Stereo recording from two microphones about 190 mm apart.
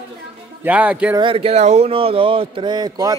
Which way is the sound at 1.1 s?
30° right (ahead or behind).